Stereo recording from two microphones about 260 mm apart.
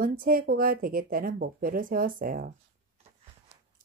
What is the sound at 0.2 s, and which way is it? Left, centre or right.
A woman's voice, right.